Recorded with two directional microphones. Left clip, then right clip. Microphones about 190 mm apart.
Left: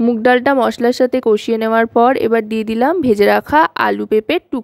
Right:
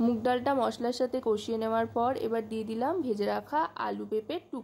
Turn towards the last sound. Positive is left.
turn(degrees=50)  # may be behind; listen again after turning